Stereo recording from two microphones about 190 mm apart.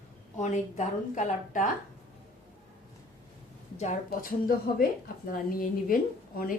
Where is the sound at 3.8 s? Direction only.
45° left (ahead or behind).